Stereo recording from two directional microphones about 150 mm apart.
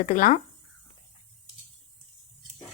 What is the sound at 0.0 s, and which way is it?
Speech, 60° left (ahead or behind).